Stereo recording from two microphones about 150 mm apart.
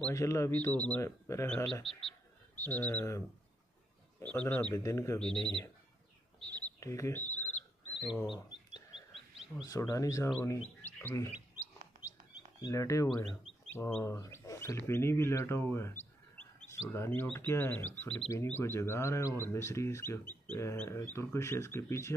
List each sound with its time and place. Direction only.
0.1 s speech: 20° left (ahead or behind)
1.7 s speech: 5° left (ahead or behind); by 5.2 s 20° left (ahead or behind)
6.4 s bird: 10° left (ahead or behind)
9.6 s speech: 20° left (ahead or behind)
12.6 s speech: 20° left (ahead or behind)